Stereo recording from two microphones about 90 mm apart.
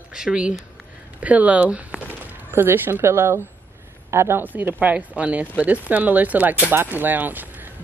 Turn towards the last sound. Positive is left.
turn(degrees=-20)  # may be behind; listen again after turning